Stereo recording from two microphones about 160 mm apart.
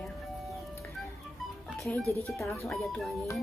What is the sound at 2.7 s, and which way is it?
Speech, centre (ahead or behind).